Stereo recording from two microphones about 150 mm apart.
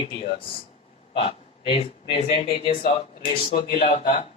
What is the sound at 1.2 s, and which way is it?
A man's voice, 40° left (ahead or behind).